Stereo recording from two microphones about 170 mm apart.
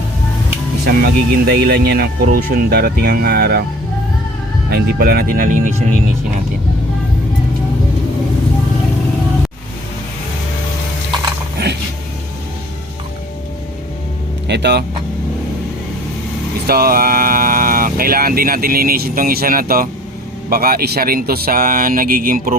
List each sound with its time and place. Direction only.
0.9 s speech: 65° right (ahead or behind)
4.7 s speech: 60° right (ahead or behind)
14.4 s speech: 85° right
16.6 s speech: 65° right (ahead or behind)